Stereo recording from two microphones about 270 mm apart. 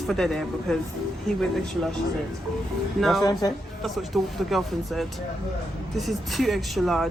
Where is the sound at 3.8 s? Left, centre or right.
Centre.